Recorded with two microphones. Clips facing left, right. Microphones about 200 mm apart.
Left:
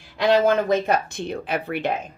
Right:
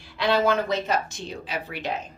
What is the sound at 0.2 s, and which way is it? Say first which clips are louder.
Speech: left 4 dB; 45° left (ahead or behind).